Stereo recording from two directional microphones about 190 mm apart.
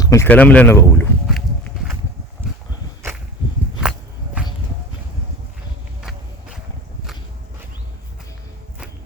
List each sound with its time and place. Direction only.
0.0 s speech: 15° left (ahead or behind)
1.3 s walk: centre (ahead or behind)
6.0 s walk: 5° right (ahead or behind)